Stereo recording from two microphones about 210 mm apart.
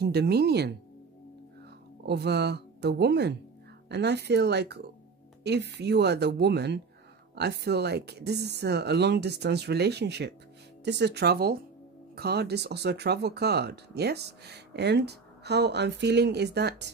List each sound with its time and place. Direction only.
0.0 s speech: 50° right (ahead or behind)
2.0 s speech: 50° right (ahead or behind)